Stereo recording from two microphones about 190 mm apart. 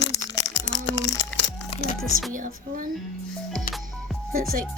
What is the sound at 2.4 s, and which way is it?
Speech, 45° right (ahead or behind).